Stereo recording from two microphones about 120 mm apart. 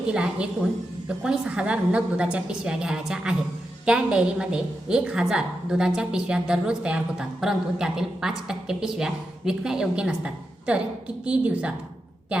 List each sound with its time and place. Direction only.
0.1 s a woman's voice: 5° right (ahead or behind)